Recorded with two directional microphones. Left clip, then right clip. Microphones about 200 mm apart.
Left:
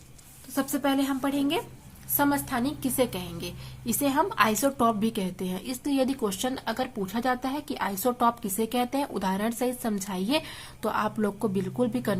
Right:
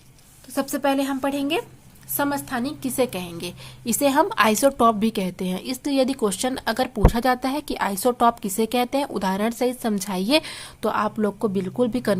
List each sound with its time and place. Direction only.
0.5 s a woman's voice: 30° right (ahead or behind)